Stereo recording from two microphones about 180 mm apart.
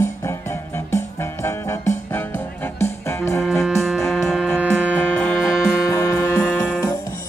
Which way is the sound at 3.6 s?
Centre (ahead or behind).